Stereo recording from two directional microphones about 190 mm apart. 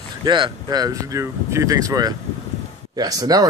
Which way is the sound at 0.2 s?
25° right (ahead or behind).